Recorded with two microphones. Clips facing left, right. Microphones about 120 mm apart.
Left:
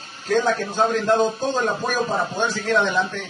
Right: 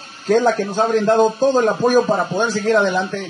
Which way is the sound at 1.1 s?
45° right (ahead or behind).